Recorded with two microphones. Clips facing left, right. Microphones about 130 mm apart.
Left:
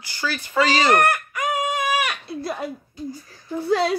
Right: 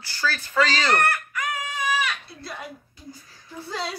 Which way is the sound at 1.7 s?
55° left (ahead or behind).